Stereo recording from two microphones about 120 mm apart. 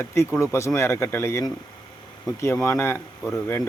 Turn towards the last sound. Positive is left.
turn(degrees=20)  # may be behind; listen again after turning